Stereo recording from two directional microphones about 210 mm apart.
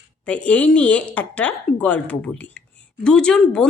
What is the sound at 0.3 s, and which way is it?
Speech, 5° left (ahead or behind).